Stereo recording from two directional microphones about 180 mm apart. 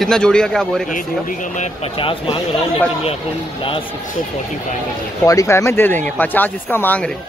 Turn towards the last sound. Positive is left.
turn(degrees=10)  # may be behind; listen again after turning